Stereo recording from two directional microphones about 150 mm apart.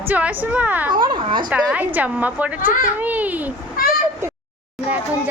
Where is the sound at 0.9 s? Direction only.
30° right (ahead or behind).